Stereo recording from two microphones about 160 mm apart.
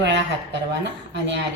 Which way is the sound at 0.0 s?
90° right.